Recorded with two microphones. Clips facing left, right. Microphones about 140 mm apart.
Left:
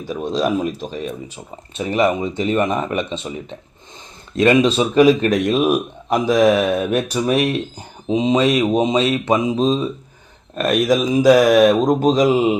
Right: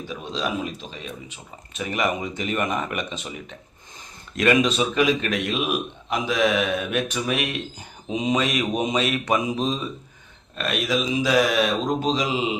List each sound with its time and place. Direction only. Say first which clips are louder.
0.1 s speech: left 9 dB; 45° left (ahead or behind)
1.7 s a man's voice: left 7 dB; 30° left (ahead or behind)
10.5 s speech: left 8 dB; 45° left (ahead or behind)